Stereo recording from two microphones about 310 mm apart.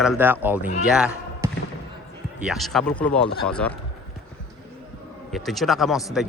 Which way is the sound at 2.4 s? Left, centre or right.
Centre.